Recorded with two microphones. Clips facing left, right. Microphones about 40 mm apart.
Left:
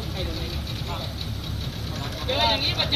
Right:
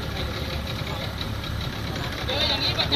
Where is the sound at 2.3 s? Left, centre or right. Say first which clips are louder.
Left 3 dB; left.